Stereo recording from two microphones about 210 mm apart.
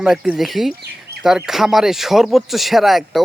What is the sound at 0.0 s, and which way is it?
Speech, 5° right (ahead or behind).